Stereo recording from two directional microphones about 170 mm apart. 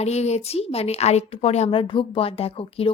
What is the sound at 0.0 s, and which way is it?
Speech, 40° left (ahead or behind).